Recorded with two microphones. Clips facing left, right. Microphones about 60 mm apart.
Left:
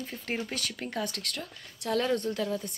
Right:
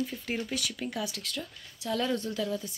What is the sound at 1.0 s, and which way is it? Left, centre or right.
Speech, left.